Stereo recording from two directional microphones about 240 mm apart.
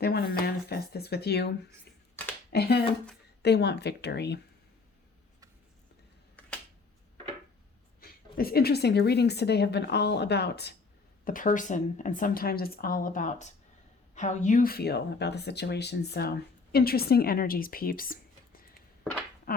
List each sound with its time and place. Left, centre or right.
0.0 s a woman's voice: left
8.0 s a woman's voice: left
11.3 s a woman's voice: left
19.5 s a sound: left